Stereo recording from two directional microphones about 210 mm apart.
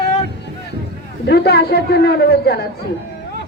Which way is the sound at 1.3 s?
50° left (ahead or behind).